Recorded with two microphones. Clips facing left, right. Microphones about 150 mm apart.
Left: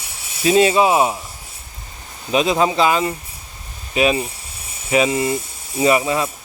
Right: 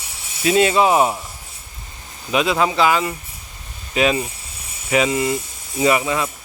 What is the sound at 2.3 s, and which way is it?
Speech, 25° left (ahead or behind).